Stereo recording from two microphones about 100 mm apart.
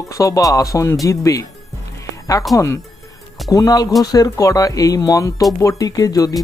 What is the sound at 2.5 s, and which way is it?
Speech, 30° left (ahead or behind).